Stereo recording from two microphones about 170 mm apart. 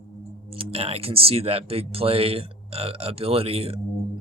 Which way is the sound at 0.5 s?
35° right (ahead or behind).